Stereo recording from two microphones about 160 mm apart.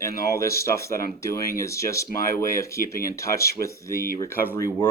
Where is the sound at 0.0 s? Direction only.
20° left (ahead or behind).